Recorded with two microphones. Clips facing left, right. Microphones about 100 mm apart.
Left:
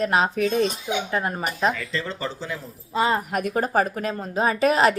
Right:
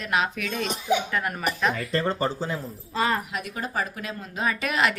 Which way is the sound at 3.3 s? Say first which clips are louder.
Left 8 dB; 45° left (ahead or behind).